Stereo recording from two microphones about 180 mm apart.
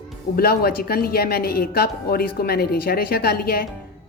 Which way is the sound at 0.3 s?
60° left (ahead or behind).